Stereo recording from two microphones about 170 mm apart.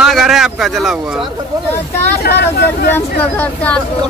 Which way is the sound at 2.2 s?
65° left (ahead or behind).